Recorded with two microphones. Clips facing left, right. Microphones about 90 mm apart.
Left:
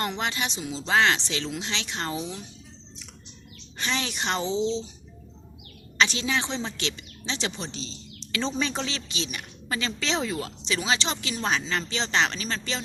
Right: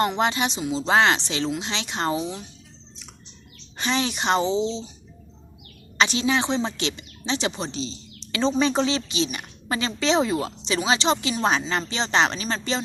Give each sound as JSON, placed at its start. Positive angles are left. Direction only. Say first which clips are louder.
{"t": 0.0, "sound": "speech", "louder": "right 7 dB", "side_deg": -25}
{"t": 0.8, "sound": "speech", "louder": "right 3 dB", "side_deg": -30}
{"t": 3.8, "sound": "speech", "louder": "right 5 dB", "side_deg": -20}
{"t": 6.0, "sound": "speech", "louder": "right 4 dB", "side_deg": -15}
{"t": 7.7, "sound": "a sound", "louder": "right 7 dB", "side_deg": -15}
{"t": 8.4, "sound": "speech", "louder": "right 9 dB", "side_deg": -20}